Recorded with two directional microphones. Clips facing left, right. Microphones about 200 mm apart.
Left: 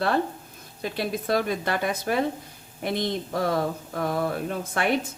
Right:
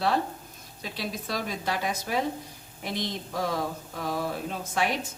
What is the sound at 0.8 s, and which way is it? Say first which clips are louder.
Speech: left 6 dB; 55° left (ahead or behind).